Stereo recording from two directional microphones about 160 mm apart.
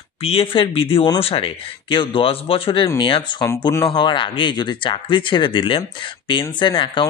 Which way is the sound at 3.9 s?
30° left (ahead or behind).